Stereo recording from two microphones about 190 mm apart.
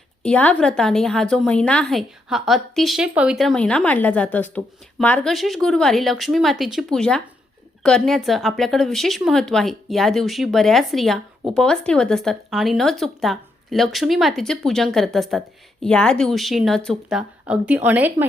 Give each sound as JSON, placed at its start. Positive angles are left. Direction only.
{"t": 0.2, "sound": "a woman's voice", "side_deg": 5}